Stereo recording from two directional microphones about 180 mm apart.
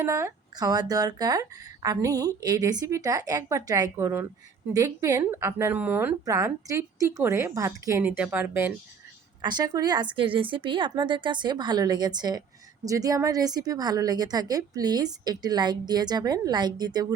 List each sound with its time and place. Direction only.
0.0 s speech: 15° right (ahead or behind)
9.4 s speech: 25° right (ahead or behind)